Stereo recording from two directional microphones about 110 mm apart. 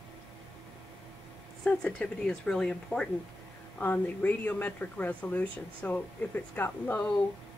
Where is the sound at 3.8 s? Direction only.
15° left (ahead or behind).